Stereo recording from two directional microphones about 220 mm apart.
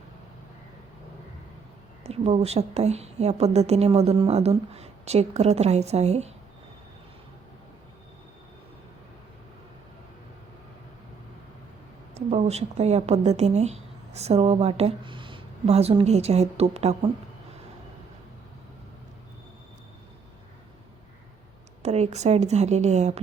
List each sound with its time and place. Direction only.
2.0 s a woman's voice: 30° right (ahead or behind)
12.1 s a woman's voice: 30° right (ahead or behind)
21.8 s speech: 30° right (ahead or behind)